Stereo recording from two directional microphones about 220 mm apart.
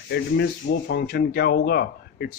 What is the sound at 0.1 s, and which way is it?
Speech, 50° left (ahead or behind).